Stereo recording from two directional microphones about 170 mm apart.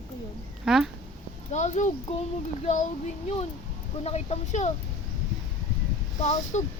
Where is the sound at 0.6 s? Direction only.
Centre (ahead or behind).